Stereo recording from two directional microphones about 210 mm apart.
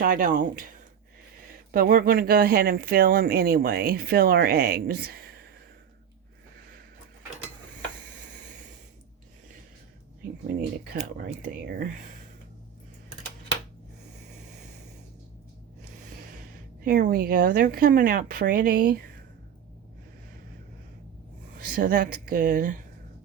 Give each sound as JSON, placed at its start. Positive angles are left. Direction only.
{"t": 0.0, "sound": "speech", "side_deg": -40}
{"t": 1.7, "sound": "speech", "side_deg": -45}
{"t": 10.9, "sound": "speech", "side_deg": -35}
{"t": 16.8, "sound": "speech", "side_deg": -45}
{"t": 21.8, "sound": "speech", "side_deg": -40}